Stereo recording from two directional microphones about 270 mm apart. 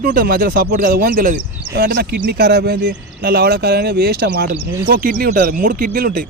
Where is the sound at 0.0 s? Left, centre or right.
Right.